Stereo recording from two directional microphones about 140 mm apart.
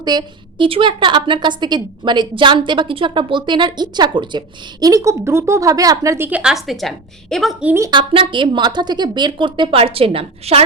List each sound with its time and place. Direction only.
0.0 s a woman's voice: 30° right (ahead or behind); by 7.5 s centre (ahead or behind)
7.6 s speech: 15° right (ahead or behind)
7.9 s a woman's voice: 35° right (ahead or behind)